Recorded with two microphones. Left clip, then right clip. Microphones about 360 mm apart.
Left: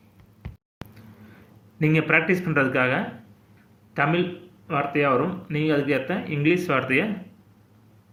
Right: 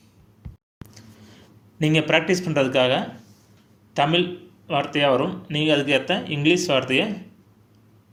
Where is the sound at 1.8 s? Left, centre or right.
Centre.